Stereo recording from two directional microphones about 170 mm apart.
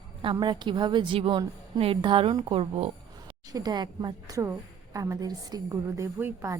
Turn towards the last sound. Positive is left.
turn(degrees=-15)  # may be behind; listen again after turning